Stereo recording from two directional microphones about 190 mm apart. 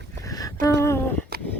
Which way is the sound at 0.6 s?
15° left (ahead or behind).